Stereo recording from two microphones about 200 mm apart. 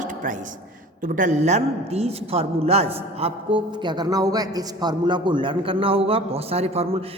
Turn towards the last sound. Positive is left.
turn(degrees=-30)  # may be behind; listen again after turning